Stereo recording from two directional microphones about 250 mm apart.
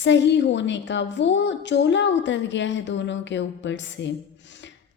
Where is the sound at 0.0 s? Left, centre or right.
Left.